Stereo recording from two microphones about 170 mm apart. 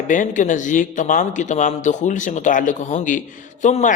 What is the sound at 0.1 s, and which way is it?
A man's voice, 50° left (ahead or behind).